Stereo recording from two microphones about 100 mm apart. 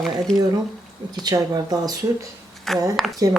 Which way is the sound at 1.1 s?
40° right (ahead or behind).